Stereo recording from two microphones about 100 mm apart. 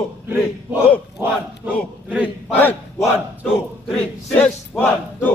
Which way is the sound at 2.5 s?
20° left (ahead or behind).